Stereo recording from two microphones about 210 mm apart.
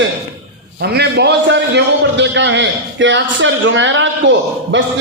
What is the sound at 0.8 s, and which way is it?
A man's voice, 50° right (ahead or behind).